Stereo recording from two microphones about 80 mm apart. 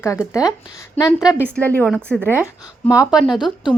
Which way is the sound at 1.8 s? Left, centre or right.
Centre.